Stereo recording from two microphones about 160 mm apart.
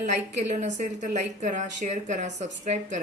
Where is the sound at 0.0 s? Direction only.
45° right (ahead or behind).